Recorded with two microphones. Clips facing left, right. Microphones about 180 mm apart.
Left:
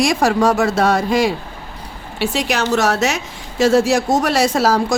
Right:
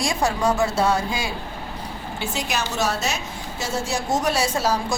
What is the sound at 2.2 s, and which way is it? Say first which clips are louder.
A woman's voice: left 8 dB; 75° left (ahead or behind).